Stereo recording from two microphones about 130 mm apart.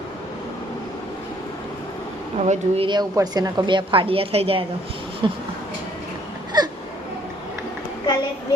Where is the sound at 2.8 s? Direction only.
35° right (ahead or behind); by 4.6 s 50° right (ahead or behind).